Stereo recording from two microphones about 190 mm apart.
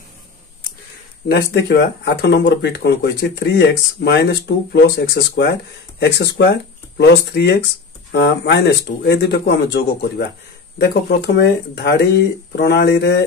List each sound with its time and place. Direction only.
1.3 s speech: 60° left (ahead or behind)